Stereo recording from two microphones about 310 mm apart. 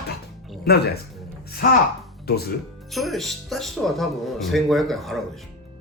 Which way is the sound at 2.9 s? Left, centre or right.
Centre.